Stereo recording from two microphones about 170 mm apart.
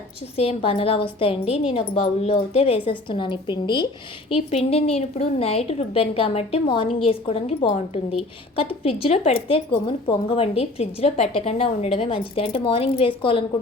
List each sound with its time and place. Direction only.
0.3 s speech: 35° left (ahead or behind)